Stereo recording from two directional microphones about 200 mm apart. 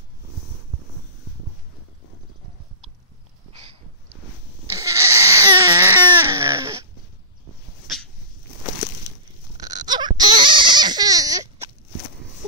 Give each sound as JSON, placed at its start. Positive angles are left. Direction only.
{"t": 4.7, "sound": "a sound", "side_deg": -15}
{"t": 5.2, "sound": "baby cry", "side_deg": -15}
{"t": 9.6, "sound": "baby cry", "side_deg": -20}